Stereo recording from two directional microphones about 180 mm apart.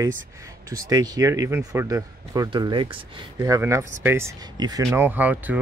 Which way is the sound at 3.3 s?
15° right (ahead or behind).